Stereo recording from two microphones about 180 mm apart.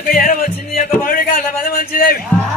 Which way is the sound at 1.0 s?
50° left (ahead or behind).